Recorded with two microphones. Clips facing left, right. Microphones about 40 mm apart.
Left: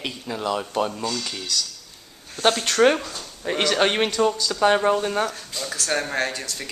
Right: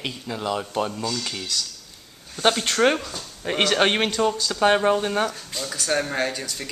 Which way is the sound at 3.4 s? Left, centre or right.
Centre.